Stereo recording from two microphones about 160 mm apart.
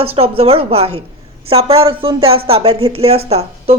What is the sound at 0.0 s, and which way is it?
Speech, 35° right (ahead or behind).